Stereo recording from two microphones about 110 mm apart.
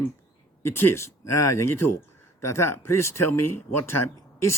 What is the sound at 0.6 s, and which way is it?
Speech, 20° left (ahead or behind).